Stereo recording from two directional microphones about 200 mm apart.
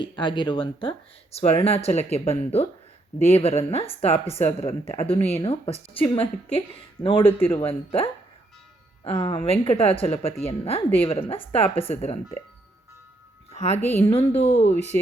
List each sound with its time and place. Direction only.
0.0 s speech: 25° left (ahead or behind)
13.5 s music: 35° left (ahead or behind)
13.9 s speech: 30° left (ahead or behind)